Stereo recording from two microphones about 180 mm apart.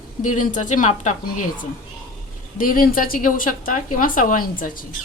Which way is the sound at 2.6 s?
50° left (ahead or behind).